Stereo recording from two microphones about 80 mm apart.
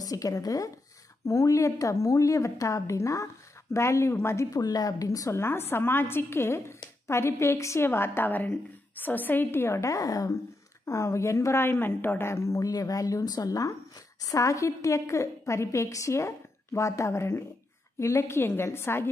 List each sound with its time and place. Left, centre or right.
0.0 s a woman's voice: left
4.6 s speech: left
5.4 s a woman's voice: left